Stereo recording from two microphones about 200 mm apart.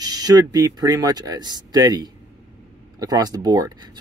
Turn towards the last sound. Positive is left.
turn(degrees=-20)  # may be behind; listen again after turning